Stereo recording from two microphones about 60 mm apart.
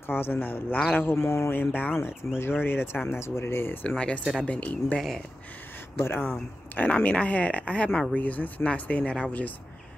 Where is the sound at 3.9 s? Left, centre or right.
Centre.